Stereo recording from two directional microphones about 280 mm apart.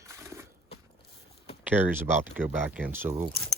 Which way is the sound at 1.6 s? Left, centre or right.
Centre.